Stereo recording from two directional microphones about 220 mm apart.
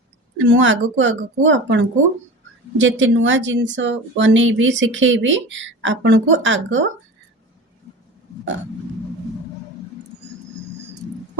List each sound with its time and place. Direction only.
0.3 s speech: 60° right (ahead or behind)